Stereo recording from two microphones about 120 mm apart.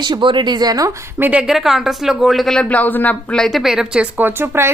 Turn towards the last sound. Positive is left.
turn(degrees=-20)  # may be behind; listen again after turning